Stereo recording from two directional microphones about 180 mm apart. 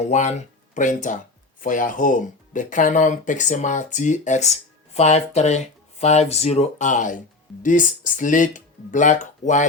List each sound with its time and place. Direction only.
0.0 s speech: 40° left (ahead or behind)